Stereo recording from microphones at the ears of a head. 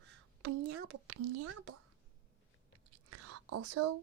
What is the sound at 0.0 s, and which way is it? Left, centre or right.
Speech, right.